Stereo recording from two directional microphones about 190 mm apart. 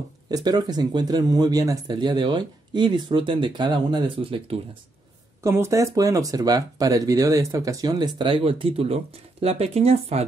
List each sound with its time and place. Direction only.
0.3 s speech: 20° right (ahead or behind)
5.4 s speech: 15° right (ahead or behind); by 10.2 s 35° right (ahead or behind)